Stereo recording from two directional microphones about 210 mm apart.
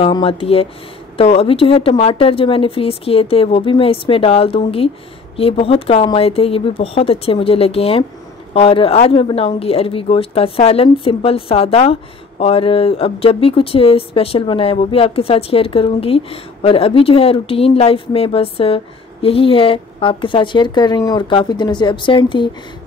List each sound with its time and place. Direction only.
0.0 s speech: 25° left (ahead or behind)